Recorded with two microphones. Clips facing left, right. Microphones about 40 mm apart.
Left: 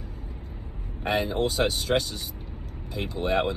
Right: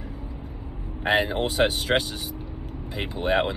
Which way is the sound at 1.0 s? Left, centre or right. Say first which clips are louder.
Right 3 dB; right.